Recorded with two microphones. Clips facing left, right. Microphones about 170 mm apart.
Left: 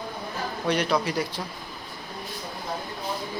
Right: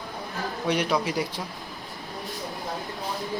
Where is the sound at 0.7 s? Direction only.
15° right (ahead or behind).